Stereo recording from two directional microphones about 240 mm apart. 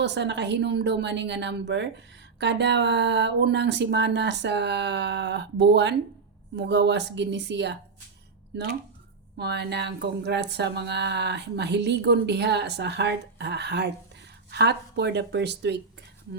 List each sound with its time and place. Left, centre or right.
0.0 s speech: right
9.4 s speech: right